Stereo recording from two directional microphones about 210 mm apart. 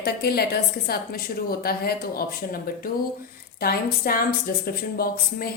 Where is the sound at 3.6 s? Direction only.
45° left (ahead or behind).